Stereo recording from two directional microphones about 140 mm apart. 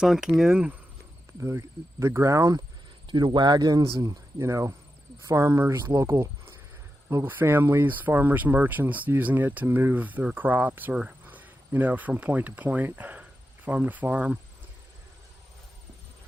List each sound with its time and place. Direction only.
0.0 s speech: 5° right (ahead or behind)
1.4 s speech: 20° right (ahead or behind)
3.1 s speech: 35° right (ahead or behind); by 14.3 s 10° right (ahead or behind)